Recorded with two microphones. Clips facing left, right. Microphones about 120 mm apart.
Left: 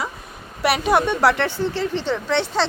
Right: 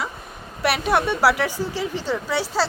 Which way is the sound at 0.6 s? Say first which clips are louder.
Left 2 dB; centre (ahead or behind).